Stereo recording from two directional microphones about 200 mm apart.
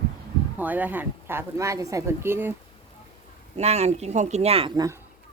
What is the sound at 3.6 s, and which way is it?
Speech, 35° right (ahead or behind).